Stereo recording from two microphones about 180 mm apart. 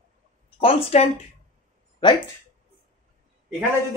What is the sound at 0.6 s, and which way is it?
A woman's voice, 30° left (ahead or behind).